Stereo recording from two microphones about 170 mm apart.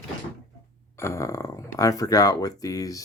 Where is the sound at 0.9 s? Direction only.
15° left (ahead or behind).